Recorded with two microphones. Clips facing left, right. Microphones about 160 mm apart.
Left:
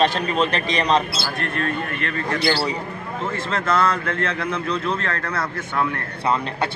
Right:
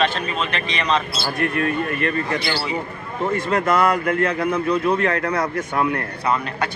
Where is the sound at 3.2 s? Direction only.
15° right (ahead or behind).